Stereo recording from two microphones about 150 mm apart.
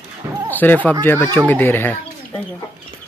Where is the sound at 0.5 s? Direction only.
10° left (ahead or behind).